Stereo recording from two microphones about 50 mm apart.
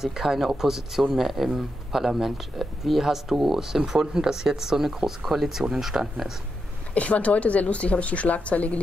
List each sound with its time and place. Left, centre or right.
0.0 s a man's voice: centre
6.9 s speech: left